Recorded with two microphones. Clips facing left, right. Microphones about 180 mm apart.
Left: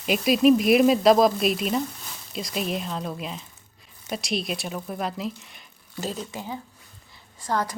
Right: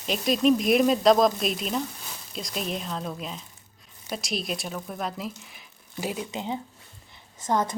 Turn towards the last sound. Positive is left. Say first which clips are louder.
# right 1 dB
turn(degrees=-20)  # may be behind; listen again after turning